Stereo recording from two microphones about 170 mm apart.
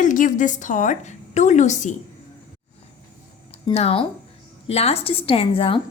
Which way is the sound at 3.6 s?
35° left (ahead or behind).